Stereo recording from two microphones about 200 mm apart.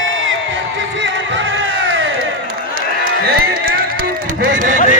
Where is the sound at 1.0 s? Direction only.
65° right (ahead or behind).